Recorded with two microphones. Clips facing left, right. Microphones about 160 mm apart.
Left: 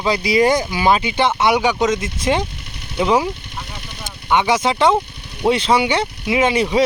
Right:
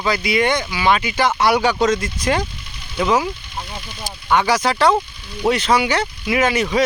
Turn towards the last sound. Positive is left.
turn(degrees=25)  # may be behind; listen again after turning